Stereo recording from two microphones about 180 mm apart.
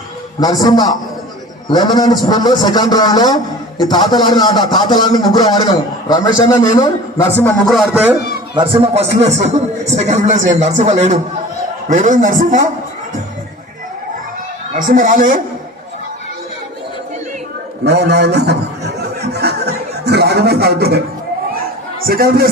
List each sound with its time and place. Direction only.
0.3 s speech: 20° left (ahead or behind)
7.6 s a man's voice: centre (ahead or behind)
8.5 s a man's voice: 30° right (ahead or behind)
11.9 s a man's voice: 45° right (ahead or behind)
14.8 s a man's voice: 50° right (ahead or behind)
17.8 s chuckle: 65° right (ahead or behind)
22.0 s a man's voice: 55° right (ahead or behind)